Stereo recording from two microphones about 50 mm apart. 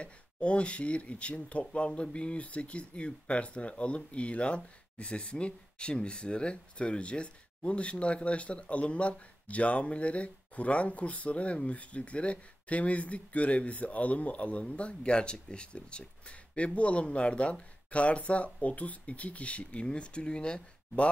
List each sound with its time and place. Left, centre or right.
0.0 s speech: left